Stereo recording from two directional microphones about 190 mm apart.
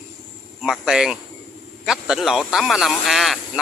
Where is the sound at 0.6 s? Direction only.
5° right (ahead or behind).